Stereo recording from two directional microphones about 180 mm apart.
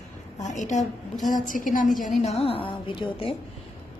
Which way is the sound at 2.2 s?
35° left (ahead or behind).